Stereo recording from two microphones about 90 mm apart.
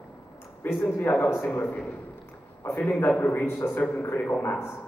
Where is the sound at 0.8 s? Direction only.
25° left (ahead or behind).